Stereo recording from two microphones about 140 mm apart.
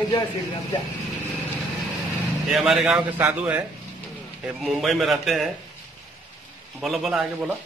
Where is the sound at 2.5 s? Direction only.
Centre (ahead or behind).